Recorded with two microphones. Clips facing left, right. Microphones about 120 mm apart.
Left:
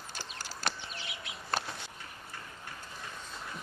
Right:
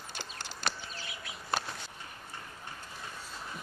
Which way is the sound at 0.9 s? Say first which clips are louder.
Even; 20° left (ahead or behind).